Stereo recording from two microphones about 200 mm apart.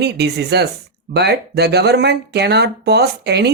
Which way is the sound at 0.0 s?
55° right (ahead or behind).